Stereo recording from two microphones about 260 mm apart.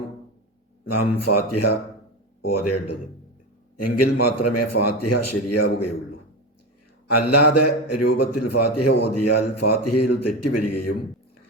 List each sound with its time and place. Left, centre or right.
0.9 s a man's voice: left
7.1 s a man's voice: left